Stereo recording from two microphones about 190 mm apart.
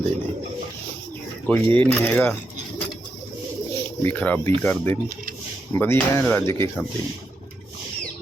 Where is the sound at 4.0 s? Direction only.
10° left (ahead or behind).